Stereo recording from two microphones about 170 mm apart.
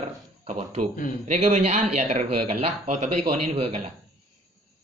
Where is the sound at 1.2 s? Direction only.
45° right (ahead or behind).